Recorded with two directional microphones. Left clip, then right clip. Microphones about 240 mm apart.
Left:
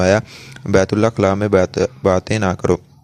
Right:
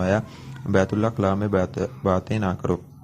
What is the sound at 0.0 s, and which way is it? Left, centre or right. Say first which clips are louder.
Speech: left 9 dB; left.